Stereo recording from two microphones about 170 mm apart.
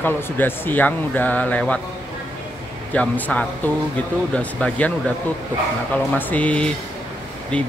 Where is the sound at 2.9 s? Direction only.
10° left (ahead or behind).